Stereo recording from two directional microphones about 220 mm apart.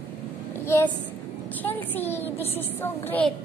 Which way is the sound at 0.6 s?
10° left (ahead or behind).